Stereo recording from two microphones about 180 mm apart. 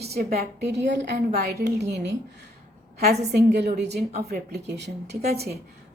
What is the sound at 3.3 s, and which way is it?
Speech, 65° right (ahead or behind).